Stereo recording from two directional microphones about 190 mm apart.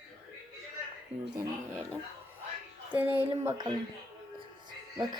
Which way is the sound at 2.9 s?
10° right (ahead or behind).